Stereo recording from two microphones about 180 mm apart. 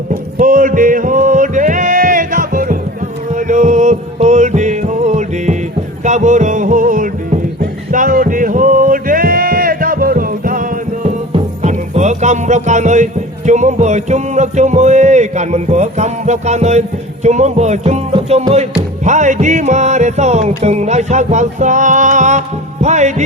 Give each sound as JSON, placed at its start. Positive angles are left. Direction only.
{"t": 0.1, "sound": "music", "side_deg": -45}
{"t": 11.3, "sound": "music", "side_deg": -35}